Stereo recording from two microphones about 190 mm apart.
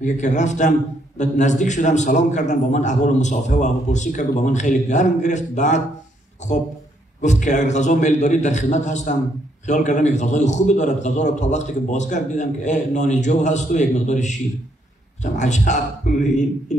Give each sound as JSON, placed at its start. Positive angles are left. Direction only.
{"t": 0.0, "sound": "a man's voice", "side_deg": 40}
{"t": 7.2, "sound": "a man's voice", "side_deg": 40}
{"t": 15.3, "sound": "a man's voice", "side_deg": 40}